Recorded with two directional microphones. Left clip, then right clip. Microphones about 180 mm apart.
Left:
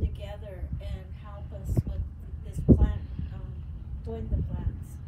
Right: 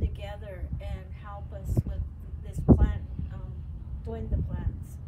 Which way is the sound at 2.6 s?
30° right (ahead or behind).